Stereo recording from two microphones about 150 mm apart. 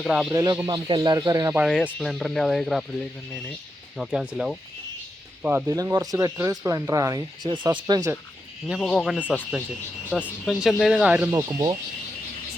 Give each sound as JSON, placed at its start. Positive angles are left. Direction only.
{"t": 0.0, "sound": "speech", "side_deg": -5}
{"t": 0.3, "sound": "speech", "side_deg": -25}
{"t": 1.5, "sound": "speech", "side_deg": -5}
{"t": 3.9, "sound": "speech", "side_deg": -5}
{"t": 5.6, "sound": "speech", "side_deg": -25}
{"t": 8.6, "sound": "speech", "side_deg": 0}